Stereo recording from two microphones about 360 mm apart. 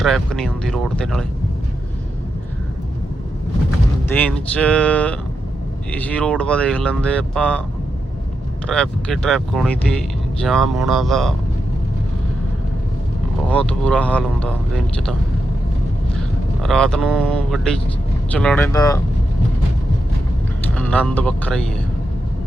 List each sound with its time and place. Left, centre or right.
0.0 s speech: centre
4.1 s speech: centre
8.6 s speech: centre
13.5 s speech: centre
16.6 s speech: centre
20.7 s speech: centre